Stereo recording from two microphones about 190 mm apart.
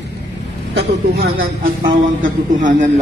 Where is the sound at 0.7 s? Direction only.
55° right (ahead or behind).